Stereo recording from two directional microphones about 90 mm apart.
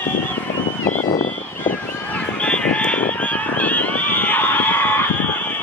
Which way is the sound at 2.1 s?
15° left (ahead or behind).